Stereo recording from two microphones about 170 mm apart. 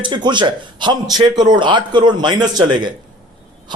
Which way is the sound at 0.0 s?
25° right (ahead or behind).